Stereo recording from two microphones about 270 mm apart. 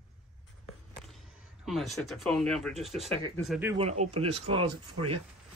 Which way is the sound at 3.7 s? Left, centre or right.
Right.